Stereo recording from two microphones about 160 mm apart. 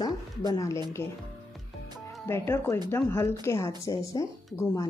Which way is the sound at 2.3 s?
15° left (ahead or behind).